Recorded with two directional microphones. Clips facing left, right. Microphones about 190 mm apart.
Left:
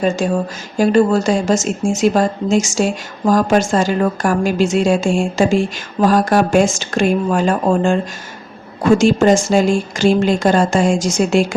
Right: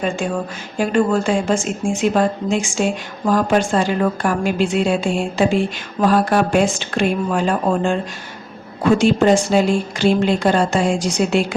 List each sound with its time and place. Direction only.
0.0 s a woman's voice: 40° left (ahead or behind)
9.2 s speech: 45° left (ahead or behind)